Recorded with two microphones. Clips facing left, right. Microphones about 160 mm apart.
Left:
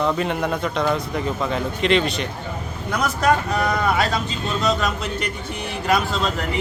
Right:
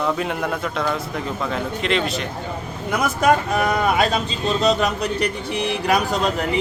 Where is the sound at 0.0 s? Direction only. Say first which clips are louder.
Left 1 dB; centre (ahead or behind).